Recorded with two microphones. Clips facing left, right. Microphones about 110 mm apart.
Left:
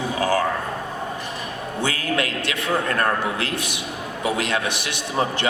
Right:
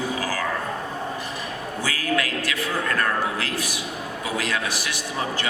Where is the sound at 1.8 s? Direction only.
25° left (ahead or behind).